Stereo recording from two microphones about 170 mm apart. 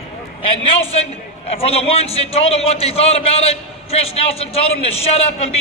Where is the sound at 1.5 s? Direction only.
35° left (ahead or behind).